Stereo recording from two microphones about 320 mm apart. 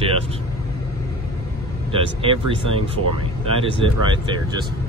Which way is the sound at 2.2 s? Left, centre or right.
Centre.